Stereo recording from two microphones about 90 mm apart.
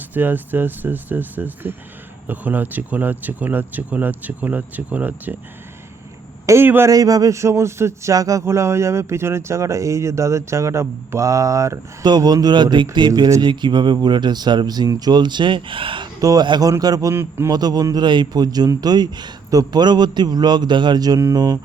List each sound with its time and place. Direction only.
0.1 s speech: 20° right (ahead or behind)
6.4 s a sound: 35° right (ahead or behind)
6.7 s speech: 25° right (ahead or behind)
6.9 s speech: 40° right (ahead or behind)
12.0 s a man's voice: 50° right (ahead or behind)
13.5 s speech: 60° right (ahead or behind)
16.2 s speech: 40° right (ahead or behind)
17.2 s speech: 25° right (ahead or behind)
17.5 s a man's voice: 45° right (ahead or behind)